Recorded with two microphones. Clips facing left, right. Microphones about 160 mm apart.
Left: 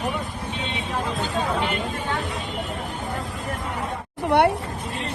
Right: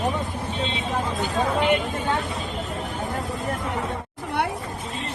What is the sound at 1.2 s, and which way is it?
Speech, 20° right (ahead or behind).